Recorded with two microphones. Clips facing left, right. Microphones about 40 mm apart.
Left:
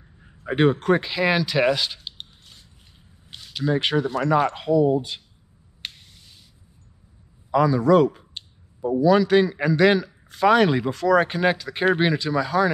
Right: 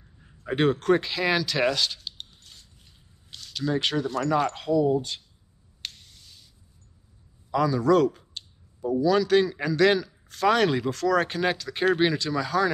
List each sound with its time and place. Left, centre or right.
0.2 s speech: centre
5.8 s a sound: left
7.5 s speech: centre